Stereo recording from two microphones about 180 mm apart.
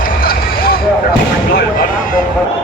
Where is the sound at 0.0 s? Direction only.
55° left (ahead or behind).